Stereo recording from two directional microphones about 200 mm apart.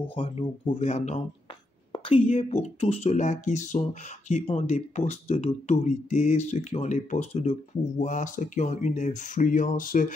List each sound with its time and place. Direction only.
0.1 s speech: 30° left (ahead or behind)